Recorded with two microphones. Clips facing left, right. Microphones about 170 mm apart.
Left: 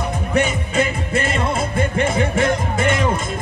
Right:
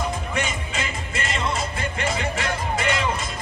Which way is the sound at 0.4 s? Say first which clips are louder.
Left 13 dB; 55° left (ahead or behind).